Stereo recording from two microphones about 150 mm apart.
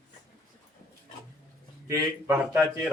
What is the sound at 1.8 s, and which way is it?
Speech, 20° right (ahead or behind).